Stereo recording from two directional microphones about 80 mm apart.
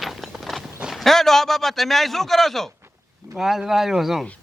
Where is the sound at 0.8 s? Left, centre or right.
Centre.